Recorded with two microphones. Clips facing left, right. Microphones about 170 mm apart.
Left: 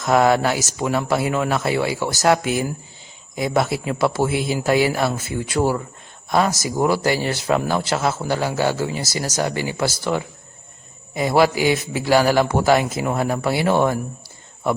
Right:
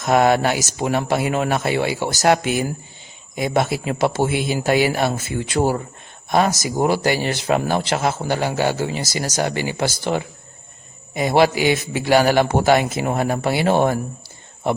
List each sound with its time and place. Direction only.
0.0 s speech: 20° right (ahead or behind)
6.3 s speech: 20° right (ahead or behind)